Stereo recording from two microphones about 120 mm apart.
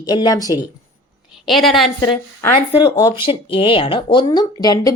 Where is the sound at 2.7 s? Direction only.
40° left (ahead or behind).